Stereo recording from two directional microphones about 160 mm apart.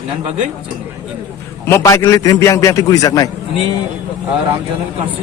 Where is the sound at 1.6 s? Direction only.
15° left (ahead or behind).